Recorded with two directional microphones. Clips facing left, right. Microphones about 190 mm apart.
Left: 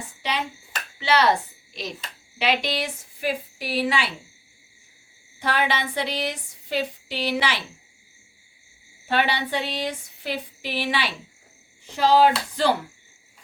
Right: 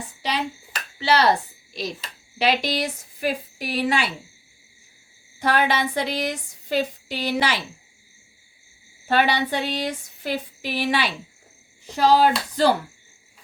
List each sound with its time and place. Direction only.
0.9 s a woman's voice: 35° right (ahead or behind)
5.4 s a woman's voice: 45° right (ahead or behind)
9.0 s a woman's voice: 40° right (ahead or behind)